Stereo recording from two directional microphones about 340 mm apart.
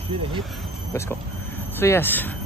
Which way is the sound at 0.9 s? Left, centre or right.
Centre.